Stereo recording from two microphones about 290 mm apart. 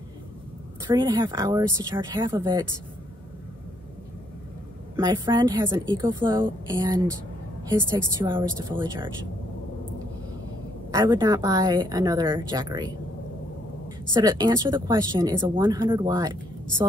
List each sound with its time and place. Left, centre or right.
0.8 s speech: centre
4.9 s speech: centre
8.2 s speech: centre
10.9 s speech: centre
14.1 s speech: centre